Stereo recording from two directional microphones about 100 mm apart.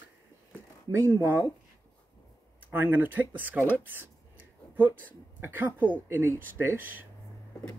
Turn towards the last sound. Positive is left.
turn(degrees=-20)  # may be behind; listen again after turning